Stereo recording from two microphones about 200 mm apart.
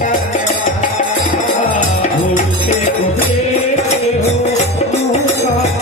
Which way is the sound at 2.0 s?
35° left (ahead or behind).